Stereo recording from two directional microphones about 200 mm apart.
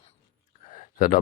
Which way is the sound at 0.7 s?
40° left (ahead or behind).